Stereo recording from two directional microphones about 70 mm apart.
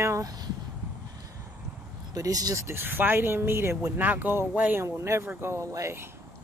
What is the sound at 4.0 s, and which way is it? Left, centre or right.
Speech, right.